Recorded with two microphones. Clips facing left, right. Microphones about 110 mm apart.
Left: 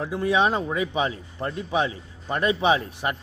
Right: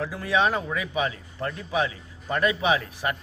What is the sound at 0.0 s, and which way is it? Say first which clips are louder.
Speech: left 2 dB; 25° left (ahead or behind).